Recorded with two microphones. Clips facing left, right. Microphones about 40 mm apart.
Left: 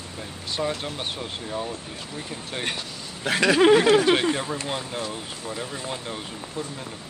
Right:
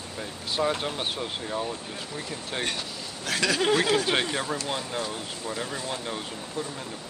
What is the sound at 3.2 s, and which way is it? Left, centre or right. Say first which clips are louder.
Speech: left 7 dB; left.